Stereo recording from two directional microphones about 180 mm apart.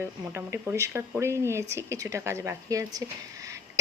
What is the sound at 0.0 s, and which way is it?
Speech, 15° right (ahead or behind).